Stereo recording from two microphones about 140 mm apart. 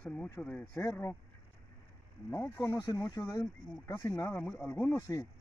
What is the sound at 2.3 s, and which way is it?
Speech, 20° left (ahead or behind).